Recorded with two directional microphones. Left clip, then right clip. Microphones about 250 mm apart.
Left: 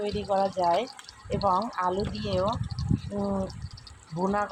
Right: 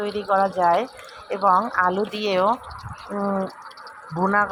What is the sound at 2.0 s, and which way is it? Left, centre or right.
Speech, right.